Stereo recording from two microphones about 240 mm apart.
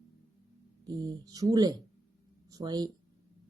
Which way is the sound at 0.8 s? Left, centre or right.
Centre.